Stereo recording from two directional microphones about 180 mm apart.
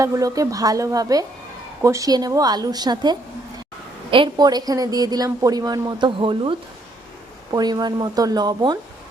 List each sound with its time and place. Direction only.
0.0 s a woman's voice: 20° right (ahead or behind)